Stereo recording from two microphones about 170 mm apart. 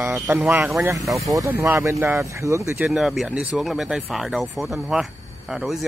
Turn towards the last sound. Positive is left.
turn(degrees=-5)  # may be behind; listen again after turning